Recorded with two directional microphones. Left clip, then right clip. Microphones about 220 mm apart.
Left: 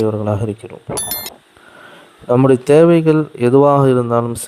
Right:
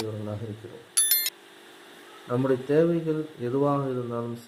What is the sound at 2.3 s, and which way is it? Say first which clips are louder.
Speech: left 14 dB; 45° left (ahead or behind).